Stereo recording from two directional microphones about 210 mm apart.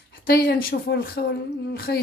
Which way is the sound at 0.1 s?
45° left (ahead or behind).